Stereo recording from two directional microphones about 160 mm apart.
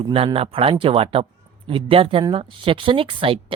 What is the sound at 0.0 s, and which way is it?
Speech, 35° right (ahead or behind).